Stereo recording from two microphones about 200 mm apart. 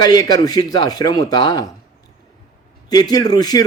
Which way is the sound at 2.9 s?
20° left (ahead or behind).